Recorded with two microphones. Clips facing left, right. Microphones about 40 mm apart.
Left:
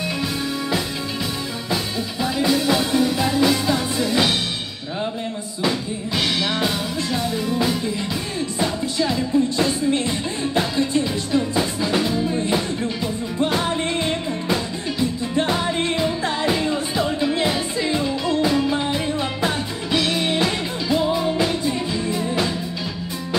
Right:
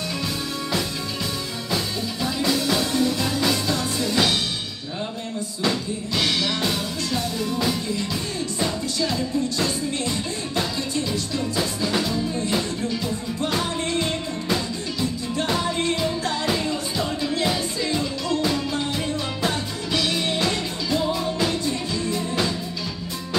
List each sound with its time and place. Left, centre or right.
2.2 s music: centre
5.6 s music: centre